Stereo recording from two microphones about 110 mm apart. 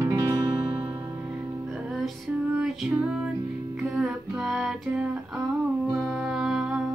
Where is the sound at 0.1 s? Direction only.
40° right (ahead or behind).